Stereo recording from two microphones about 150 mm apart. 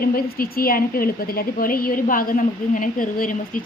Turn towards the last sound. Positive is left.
turn(degrees=65)  # may be behind; listen again after turning